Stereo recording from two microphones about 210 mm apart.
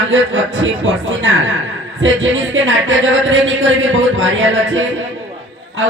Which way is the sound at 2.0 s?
65° right (ahead or behind).